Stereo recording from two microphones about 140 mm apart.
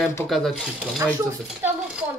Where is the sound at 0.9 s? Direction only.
15° right (ahead or behind).